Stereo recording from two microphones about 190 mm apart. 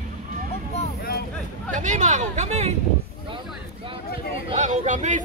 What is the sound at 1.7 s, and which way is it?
Speech, 40° right (ahead or behind).